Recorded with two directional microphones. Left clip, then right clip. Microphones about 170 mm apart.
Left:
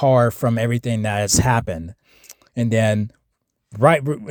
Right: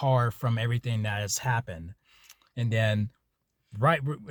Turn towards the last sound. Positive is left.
turn(degrees=45)  # may be behind; listen again after turning